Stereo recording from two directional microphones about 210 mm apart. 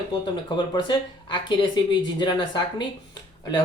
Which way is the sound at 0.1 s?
20° left (ahead or behind).